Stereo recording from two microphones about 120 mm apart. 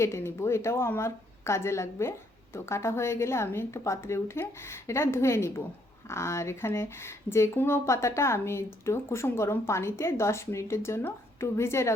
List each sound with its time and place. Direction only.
0.0 s speech: 20° left (ahead or behind)